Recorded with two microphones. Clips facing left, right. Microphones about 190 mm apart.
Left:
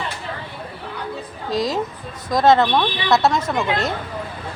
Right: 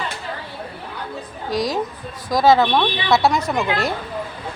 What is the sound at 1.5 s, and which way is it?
Speech, 25° left (ahead or behind).